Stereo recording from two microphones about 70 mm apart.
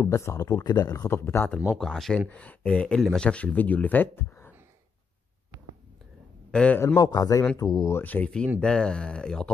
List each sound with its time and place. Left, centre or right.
0.0 s speech: left
1.1 s speech: left
1.8 s speech: centre
2.1 s speech: left
6.5 s speech: centre
7.0 s a man's voice: left
8.0 s speech: left
8.5 s speech: centre